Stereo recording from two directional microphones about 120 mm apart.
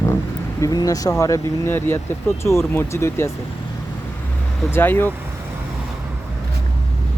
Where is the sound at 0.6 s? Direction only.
30° left (ahead or behind).